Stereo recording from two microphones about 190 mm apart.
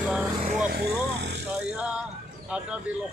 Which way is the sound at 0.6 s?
55° right (ahead or behind).